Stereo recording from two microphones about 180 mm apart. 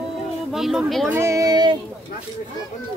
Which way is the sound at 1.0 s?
15° right (ahead or behind).